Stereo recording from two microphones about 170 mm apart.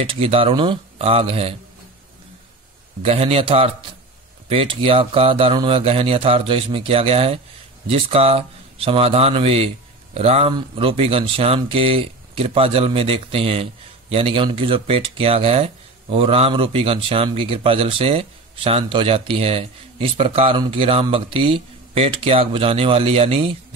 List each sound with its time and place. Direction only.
0.0 s speech: 30° right (ahead or behind)
3.0 s speech: 35° right (ahead or behind)